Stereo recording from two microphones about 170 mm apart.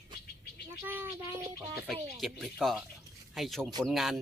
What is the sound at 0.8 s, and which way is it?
Speech, 10° right (ahead or behind).